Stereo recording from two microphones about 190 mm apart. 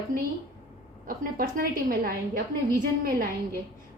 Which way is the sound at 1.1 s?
50° right (ahead or behind).